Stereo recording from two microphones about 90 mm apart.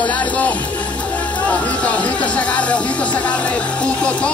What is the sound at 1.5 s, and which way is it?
Speech, 15° left (ahead or behind).